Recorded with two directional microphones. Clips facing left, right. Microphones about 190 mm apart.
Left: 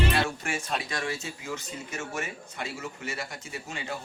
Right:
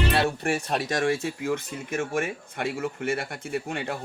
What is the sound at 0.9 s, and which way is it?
Speech, 50° right (ahead or behind).